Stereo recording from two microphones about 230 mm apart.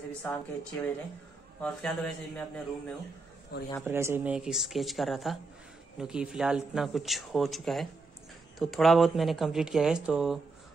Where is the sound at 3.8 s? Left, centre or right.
Centre.